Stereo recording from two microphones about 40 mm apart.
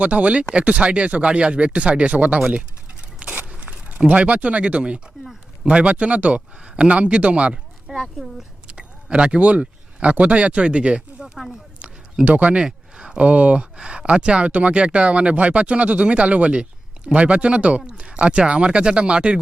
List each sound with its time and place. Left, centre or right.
0.0 s speech: right
3.2 s a sound: right
4.0 s speech: right
7.9 s speech: centre
8.6 s speech: right
12.5 s a sound: centre
13.1 s speech: right